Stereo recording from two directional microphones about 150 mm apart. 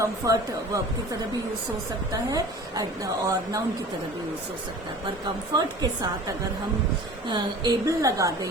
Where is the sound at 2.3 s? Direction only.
25° right (ahead or behind).